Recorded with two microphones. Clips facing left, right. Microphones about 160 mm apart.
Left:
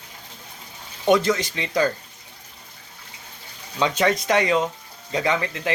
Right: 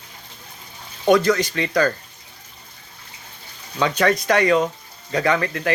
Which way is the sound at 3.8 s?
20° left (ahead or behind).